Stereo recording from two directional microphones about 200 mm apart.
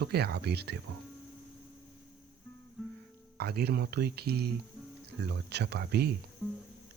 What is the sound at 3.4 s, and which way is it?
Speech, 50° right (ahead or behind).